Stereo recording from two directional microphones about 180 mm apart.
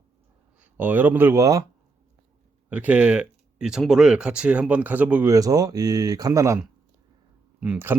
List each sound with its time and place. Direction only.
0.6 s speech: 10° right (ahead or behind)
2.6 s speech: 10° right (ahead or behind)
5.3 s speech: 20° right (ahead or behind)